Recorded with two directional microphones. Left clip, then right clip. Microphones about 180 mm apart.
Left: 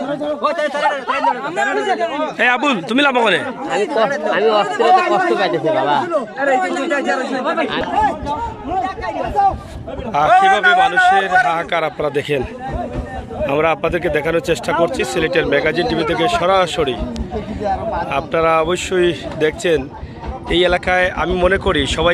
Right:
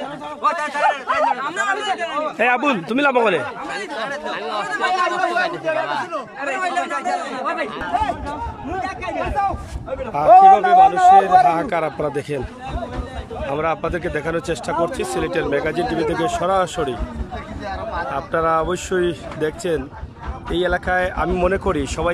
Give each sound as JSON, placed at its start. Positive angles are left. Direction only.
{"t": 0.4, "sound": "speech", "side_deg": 40}
{"t": 1.7, "sound": "speech", "side_deg": 35}
{"t": 2.3, "sound": "a man's voice", "side_deg": -5}
{"t": 3.7, "sound": "speech", "side_deg": 40}
{"t": 6.7, "sound": "speech", "side_deg": 50}
{"t": 10.1, "sound": "a man's voice", "side_deg": -10}
{"t": 13.5, "sound": "a man's voice", "side_deg": 0}
{"t": 18.1, "sound": "a man's voice", "side_deg": 0}